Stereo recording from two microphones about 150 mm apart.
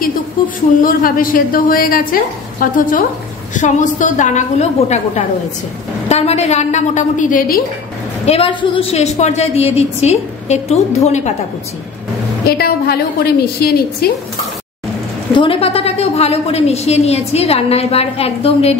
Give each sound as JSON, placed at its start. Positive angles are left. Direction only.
{"t": 0.8, "sound": "a woman's voice", "side_deg": 70}
{"t": 8.3, "sound": "a woman's voice", "side_deg": 35}
{"t": 12.4, "sound": "a woman's voice", "side_deg": 90}
{"t": 15.3, "sound": "a woman's voice", "side_deg": 35}